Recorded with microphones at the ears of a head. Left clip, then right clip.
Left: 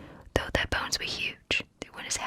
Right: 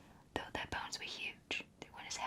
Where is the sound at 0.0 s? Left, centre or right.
Left.